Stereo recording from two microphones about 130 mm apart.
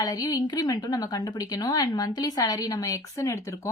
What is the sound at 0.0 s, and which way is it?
A woman's voice, 30° left (ahead or behind).